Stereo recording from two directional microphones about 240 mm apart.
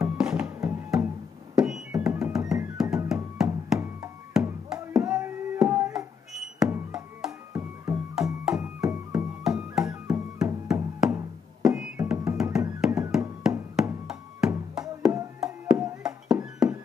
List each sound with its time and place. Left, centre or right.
0.0 s music: centre